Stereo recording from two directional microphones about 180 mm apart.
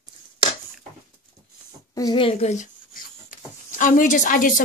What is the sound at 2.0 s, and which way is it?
A woman's voice, 25° left (ahead or behind).